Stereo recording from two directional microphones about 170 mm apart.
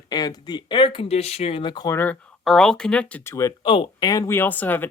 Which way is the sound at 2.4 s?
Centre (ahead or behind).